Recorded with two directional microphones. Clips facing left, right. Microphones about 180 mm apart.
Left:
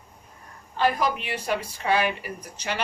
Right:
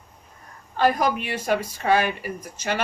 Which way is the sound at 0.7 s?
50° right (ahead or behind).